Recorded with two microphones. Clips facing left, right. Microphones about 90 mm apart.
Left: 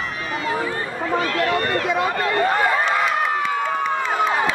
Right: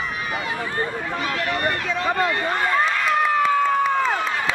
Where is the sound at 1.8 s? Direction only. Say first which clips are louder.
Left 4 dB; 15° left (ahead or behind).